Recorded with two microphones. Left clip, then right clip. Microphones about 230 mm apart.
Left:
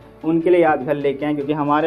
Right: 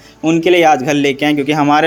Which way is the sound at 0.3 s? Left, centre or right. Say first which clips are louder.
Right 5 dB; right.